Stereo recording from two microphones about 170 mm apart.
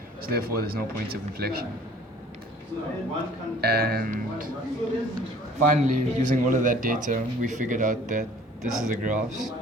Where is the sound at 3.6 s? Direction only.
65° right (ahead or behind).